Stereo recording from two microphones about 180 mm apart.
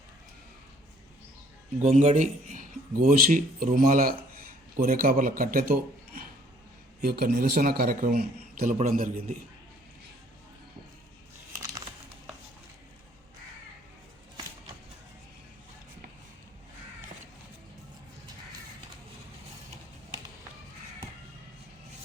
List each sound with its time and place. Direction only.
1.8 s a man's voice: 40° right (ahead or behind)